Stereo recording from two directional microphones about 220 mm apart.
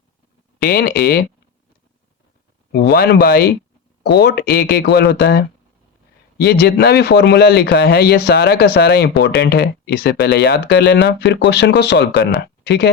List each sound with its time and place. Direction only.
0.6 s speech: 45° left (ahead or behind)
2.7 s speech: 45° left (ahead or behind)